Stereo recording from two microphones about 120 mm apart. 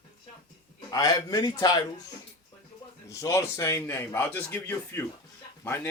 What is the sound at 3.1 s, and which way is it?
A man's voice, 25° left (ahead or behind).